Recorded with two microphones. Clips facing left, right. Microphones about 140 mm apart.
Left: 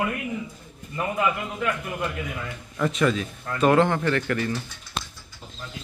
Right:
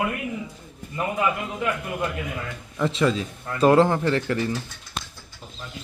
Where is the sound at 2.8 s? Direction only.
25° right (ahead or behind).